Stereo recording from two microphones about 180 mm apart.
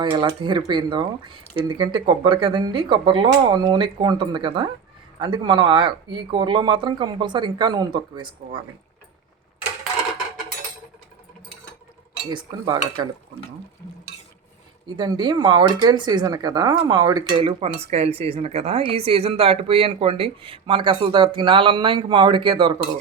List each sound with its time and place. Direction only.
0.0 s speech: 25° right (ahead or behind)
12.3 s speech: 25° right (ahead or behind)
14.9 s speech: 25° right (ahead or behind)